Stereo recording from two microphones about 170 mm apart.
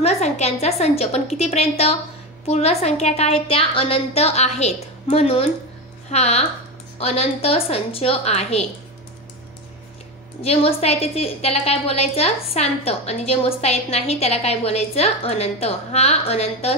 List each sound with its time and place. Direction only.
0.0 s a woman's voice: 40° left (ahead or behind)
10.4 s a woman's voice: 35° left (ahead or behind)